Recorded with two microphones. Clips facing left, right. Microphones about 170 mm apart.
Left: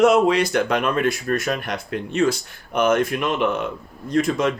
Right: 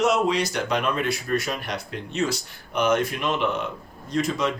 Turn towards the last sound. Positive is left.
turn(degrees=50)  # may be behind; listen again after turning